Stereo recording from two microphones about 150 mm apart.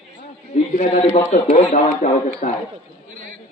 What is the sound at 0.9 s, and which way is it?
Speech, 40° left (ahead or behind).